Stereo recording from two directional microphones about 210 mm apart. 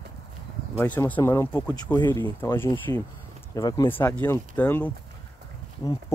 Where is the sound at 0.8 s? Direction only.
10° left (ahead or behind).